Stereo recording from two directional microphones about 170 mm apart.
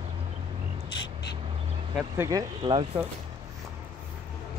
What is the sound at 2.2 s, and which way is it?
Speech, 20° right (ahead or behind).